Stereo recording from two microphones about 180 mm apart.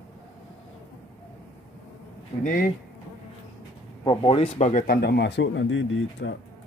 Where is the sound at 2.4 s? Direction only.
55° left (ahead or behind).